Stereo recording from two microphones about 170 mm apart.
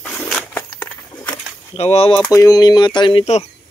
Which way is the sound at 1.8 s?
35° left (ahead or behind).